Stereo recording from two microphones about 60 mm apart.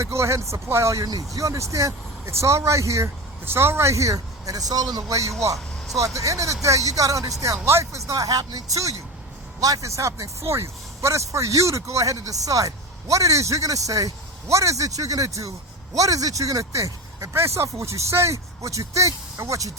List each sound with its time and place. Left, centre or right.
0.0 s speech: right
1.0 s speech: right
3.4 s speech: right
7.6 s speech: right
14.4 s speech: right
17.3 s speech: right
18.6 s speech: right